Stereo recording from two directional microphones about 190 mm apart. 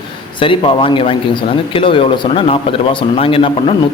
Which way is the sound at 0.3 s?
25° left (ahead or behind).